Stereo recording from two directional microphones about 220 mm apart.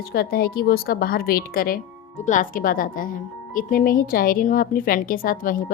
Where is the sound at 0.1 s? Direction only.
45° left (ahead or behind).